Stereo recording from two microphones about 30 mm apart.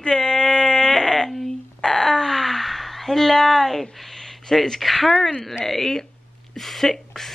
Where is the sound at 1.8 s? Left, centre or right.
Centre.